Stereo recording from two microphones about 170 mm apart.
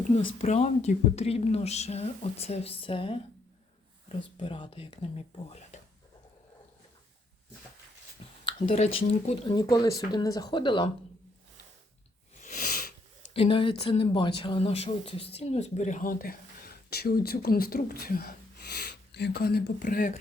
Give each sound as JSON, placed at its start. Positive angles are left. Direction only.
{"t": 0.2, "sound": "speech", "side_deg": 45}
{"t": 4.4, "sound": "speech", "side_deg": 30}
{"t": 8.4, "sound": "speech", "side_deg": 35}
{"t": 12.4, "sound": "a sound", "side_deg": 55}
{"t": 13.3, "sound": "speech", "side_deg": 30}